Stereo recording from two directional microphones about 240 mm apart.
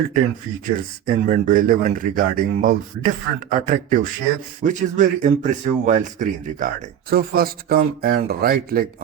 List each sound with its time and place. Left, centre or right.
0.6 s speech: right